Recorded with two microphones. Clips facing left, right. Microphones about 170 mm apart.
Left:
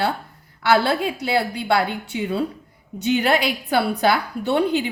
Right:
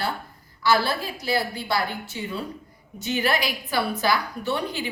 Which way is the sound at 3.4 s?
60° left (ahead or behind).